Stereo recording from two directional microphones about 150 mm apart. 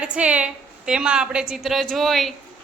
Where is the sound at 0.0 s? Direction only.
10° right (ahead or behind).